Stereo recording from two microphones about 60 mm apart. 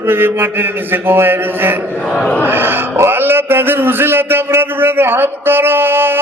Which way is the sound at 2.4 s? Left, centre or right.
Right.